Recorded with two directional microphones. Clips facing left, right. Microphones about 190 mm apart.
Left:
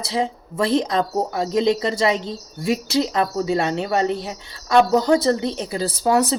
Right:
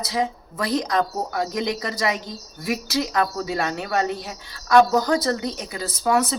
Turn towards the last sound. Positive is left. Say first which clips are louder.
# left 3 dB
turn(degrees=30)  # may be behind; listen again after turning